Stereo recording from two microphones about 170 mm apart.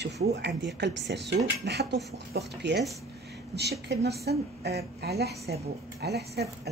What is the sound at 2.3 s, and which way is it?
A woman's voice, 75° right (ahead or behind).